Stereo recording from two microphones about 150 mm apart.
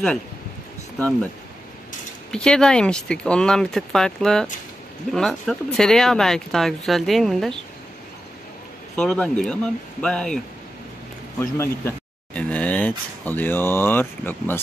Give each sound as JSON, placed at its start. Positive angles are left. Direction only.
{"t": 0.9, "sound": "speech", "side_deg": 10}
{"t": 2.3, "sound": "speech", "side_deg": 5}
{"t": 8.9, "sound": "speech", "side_deg": 5}
{"t": 11.3, "sound": "speech", "side_deg": 15}